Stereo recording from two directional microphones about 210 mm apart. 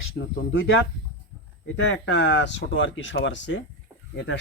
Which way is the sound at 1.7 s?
60° left (ahead or behind).